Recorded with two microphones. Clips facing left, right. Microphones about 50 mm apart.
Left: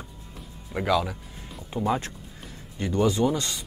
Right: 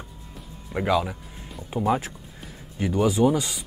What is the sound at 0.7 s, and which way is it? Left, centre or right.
Speech, centre.